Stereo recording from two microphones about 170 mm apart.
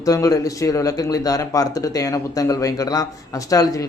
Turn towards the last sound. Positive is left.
turn(degrees=20)  # may be behind; listen again after turning